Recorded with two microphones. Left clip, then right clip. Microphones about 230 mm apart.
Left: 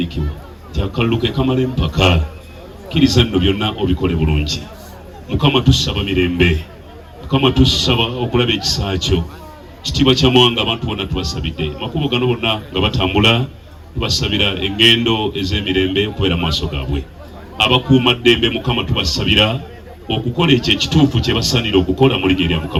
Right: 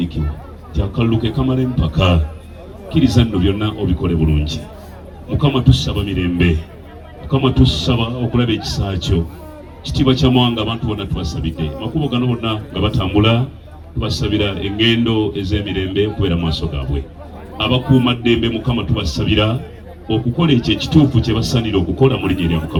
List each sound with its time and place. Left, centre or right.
0.8 s a man's voice: left
18.0 s a man's voice: left